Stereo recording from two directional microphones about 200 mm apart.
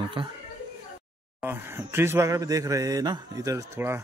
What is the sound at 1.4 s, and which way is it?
Speech, 10° right (ahead or behind).